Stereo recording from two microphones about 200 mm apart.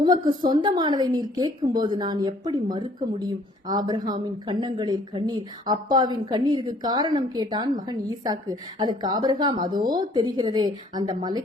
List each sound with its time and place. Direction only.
0.0 s a woman's voice: 20° right (ahead or behind)